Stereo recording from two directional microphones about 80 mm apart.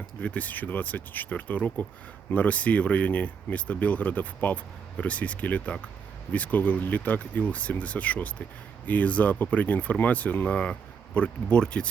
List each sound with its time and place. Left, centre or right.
0.2 s speech: centre